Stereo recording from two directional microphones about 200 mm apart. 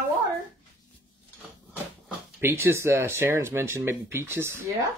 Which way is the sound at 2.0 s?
10° right (ahead or behind).